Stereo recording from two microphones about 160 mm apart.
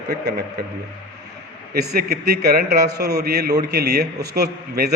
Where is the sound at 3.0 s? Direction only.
90° right.